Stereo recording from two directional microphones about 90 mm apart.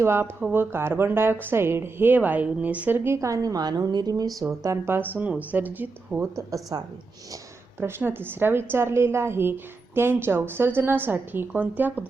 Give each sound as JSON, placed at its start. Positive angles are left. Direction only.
{"t": 0.0, "sound": "a woman's voice", "side_deg": -30}
{"t": 4.9, "sound": "a woman's voice", "side_deg": -20}
{"t": 6.3, "sound": "a woman's voice", "side_deg": -40}
{"t": 7.8, "sound": "a woman's voice", "side_deg": -25}